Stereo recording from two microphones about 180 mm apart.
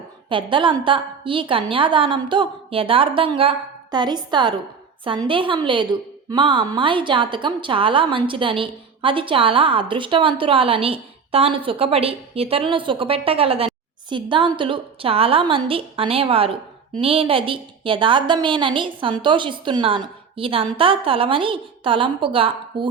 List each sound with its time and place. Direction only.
0.3 s a woman's voice: 25° right (ahead or behind)